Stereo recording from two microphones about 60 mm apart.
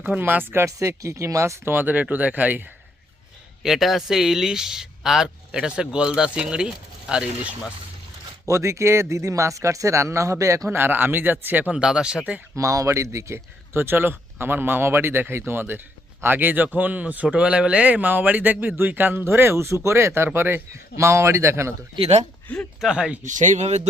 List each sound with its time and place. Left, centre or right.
0.2 s speech: right
0.6 s speech: right
1.7 s speech: right
3.6 s a man's voice: centre
8.4 s speech: right
10.7 s speech: right
11.7 s a man's voice: centre
12.5 s speech: right
19.2 s a man's voice: right
22.8 s a man's voice: centre